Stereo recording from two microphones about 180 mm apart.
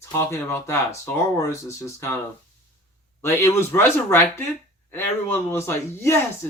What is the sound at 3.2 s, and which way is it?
Speech, 15° left (ahead or behind).